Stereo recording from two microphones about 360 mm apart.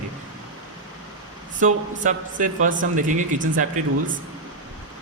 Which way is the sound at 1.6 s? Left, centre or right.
Right.